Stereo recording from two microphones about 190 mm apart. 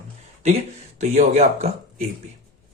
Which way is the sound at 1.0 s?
35° right (ahead or behind).